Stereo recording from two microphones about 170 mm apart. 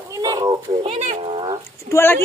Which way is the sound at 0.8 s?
40° right (ahead or behind).